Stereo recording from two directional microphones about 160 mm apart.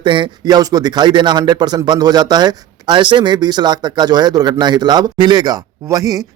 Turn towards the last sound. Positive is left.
turn(degrees=-20)  # may be behind; listen again after turning